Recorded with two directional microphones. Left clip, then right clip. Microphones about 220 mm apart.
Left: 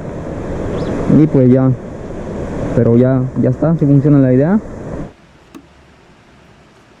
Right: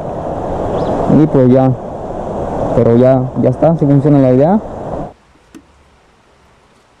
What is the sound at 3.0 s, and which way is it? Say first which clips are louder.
Speech: right 5 dB; 15° left (ahead or behind).